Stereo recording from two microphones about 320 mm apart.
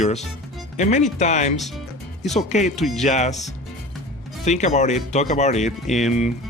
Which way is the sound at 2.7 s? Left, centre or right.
Centre.